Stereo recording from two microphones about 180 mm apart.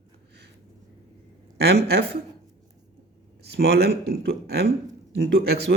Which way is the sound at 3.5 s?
65° right (ahead or behind).